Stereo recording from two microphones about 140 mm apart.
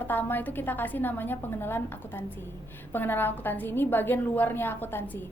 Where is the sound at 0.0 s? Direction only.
15° left (ahead or behind).